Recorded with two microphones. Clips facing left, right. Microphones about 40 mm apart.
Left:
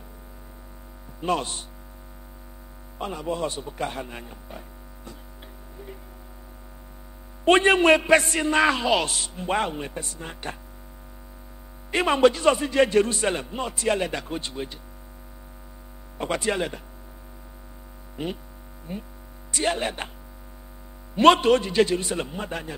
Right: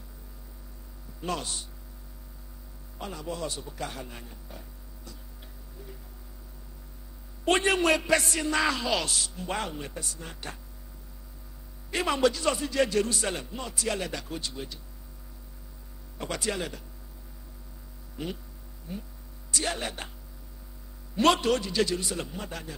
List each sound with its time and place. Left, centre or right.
1.2 s a man's voice: left
3.0 s a man's voice: left
7.4 s a man's voice: left
11.9 s a man's voice: left
16.2 s a man's voice: left
18.1 s mains hum: left
18.9 s hum: left
19.5 s a man's voice: left
21.2 s a man's voice: left